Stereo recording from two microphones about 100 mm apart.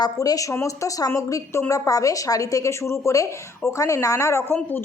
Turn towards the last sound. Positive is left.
turn(degrees=30)  # may be behind; listen again after turning